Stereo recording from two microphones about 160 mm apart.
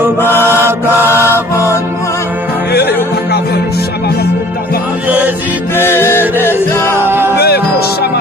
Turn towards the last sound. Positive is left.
turn(degrees=85)